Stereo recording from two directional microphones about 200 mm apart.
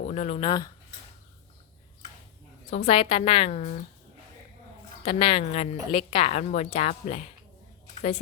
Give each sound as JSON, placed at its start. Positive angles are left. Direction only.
{"t": 0.1, "sound": "a woman's voice", "side_deg": 35}
{"t": 2.6, "sound": "a woman's voice", "side_deg": 35}
{"t": 5.0, "sound": "a woman's voice", "side_deg": 30}